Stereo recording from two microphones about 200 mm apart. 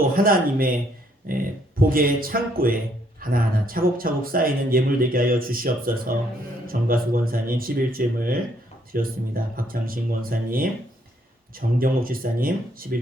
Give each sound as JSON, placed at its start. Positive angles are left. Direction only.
{"t": 0.2, "sound": "speech", "side_deg": -45}
{"t": 11.8, "sound": "speech", "side_deg": -45}